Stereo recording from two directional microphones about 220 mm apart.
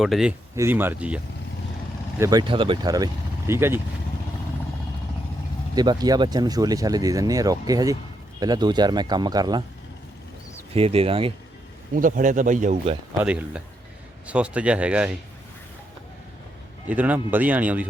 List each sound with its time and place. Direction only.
0.0 s speech: centre (ahead or behind)
5.7 s speech: 20° right (ahead or behind)
10.8 s speech: 25° right (ahead or behind)
11.9 s speech: 40° right (ahead or behind)
13.1 s speech: 5° right (ahead or behind)
16.9 s speech: 5° right (ahead or behind)